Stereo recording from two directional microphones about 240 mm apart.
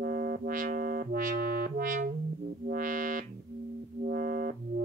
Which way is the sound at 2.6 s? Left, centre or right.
Right.